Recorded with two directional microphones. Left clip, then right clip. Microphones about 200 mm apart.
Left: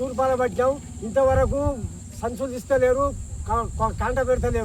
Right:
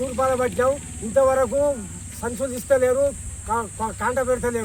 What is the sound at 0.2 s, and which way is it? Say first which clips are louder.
Speech: right 1 dB; 20° left (ahead or behind).